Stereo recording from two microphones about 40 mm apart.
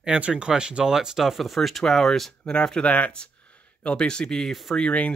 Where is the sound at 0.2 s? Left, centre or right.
Right.